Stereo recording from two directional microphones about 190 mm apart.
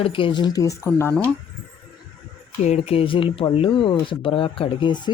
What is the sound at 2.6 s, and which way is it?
Speech, 35° left (ahead or behind).